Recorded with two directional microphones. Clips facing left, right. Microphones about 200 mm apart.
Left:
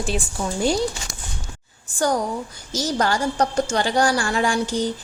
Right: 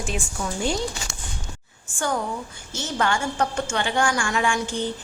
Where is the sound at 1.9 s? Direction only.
40° left (ahead or behind).